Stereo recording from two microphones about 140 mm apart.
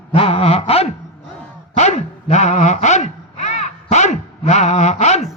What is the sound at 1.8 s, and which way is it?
Speech, 50° left (ahead or behind).